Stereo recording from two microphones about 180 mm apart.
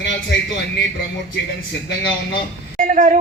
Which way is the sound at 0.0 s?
80° left.